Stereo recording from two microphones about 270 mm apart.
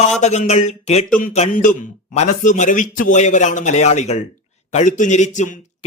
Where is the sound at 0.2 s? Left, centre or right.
Left.